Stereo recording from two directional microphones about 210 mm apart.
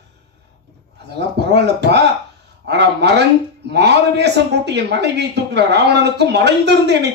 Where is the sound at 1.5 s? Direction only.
55° right (ahead or behind).